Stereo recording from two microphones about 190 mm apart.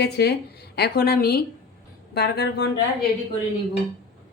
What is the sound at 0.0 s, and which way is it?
Speech, 60° left (ahead or behind).